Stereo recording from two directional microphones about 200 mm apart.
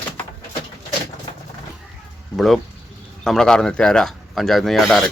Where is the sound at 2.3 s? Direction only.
Centre (ahead or behind).